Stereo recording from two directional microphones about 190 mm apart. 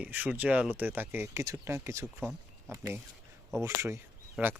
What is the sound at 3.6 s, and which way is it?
Speech, 15° right (ahead or behind).